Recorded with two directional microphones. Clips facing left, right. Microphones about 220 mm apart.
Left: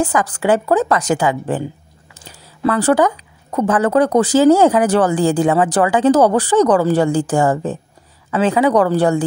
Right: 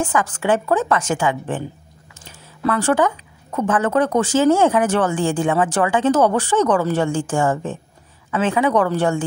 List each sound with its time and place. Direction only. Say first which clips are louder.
0.0 s speech: left 3 dB; 35° left (ahead or behind)
2.2 s a sound: left 3 dB; 35° left (ahead or behind)
3.5 s speech: left 4 dB; 35° left (ahead or behind)